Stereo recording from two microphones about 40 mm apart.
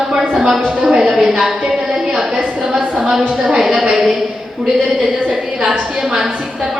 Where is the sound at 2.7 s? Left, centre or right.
Centre.